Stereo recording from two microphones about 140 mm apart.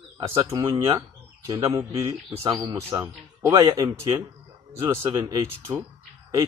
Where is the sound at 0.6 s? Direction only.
25° right (ahead or behind).